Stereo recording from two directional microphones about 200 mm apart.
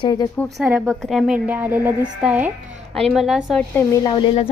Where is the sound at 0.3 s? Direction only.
Centre (ahead or behind).